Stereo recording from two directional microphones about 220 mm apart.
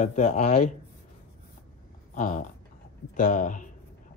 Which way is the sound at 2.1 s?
35° left (ahead or behind).